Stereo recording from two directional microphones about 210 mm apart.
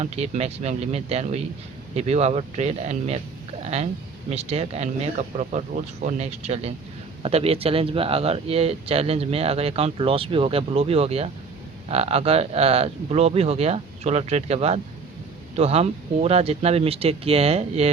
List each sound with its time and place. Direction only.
0.0 s speech: 30° right (ahead or behind)